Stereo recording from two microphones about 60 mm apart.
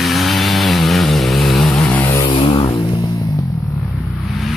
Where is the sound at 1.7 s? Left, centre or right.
Left.